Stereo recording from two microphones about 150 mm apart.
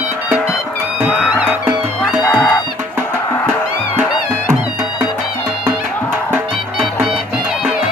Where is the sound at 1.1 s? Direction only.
5° right (ahead or behind).